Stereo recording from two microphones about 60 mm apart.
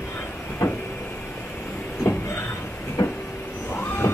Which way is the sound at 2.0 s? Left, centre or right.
Left.